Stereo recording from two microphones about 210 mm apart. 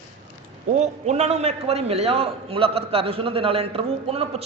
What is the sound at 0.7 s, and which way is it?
A man's voice, 35° right (ahead or behind).